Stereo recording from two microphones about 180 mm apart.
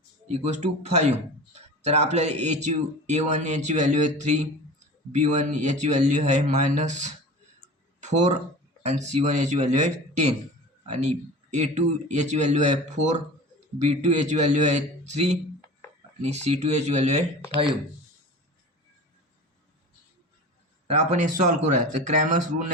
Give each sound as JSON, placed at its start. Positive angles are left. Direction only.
{"t": 0.3, "sound": "speech", "side_deg": -40}
{"t": 20.9, "sound": "speech", "side_deg": -40}